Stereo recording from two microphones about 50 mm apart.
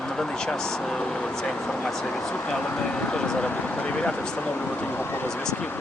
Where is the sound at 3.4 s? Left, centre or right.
Left.